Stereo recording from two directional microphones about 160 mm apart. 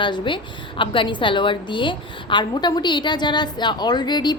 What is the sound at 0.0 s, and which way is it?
A woman's voice, 30° left (ahead or behind).